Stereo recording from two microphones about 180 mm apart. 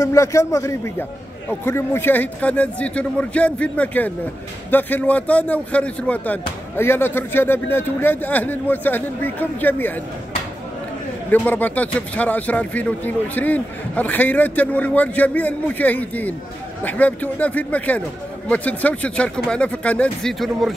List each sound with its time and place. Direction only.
0.0 s speech: 15° left (ahead or behind)
11.2 s speech: 10° left (ahead or behind)